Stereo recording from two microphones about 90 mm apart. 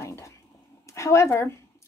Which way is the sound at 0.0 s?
30° left (ahead or behind).